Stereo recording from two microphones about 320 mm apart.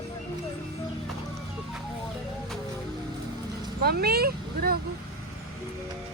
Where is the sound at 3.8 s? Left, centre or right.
Right.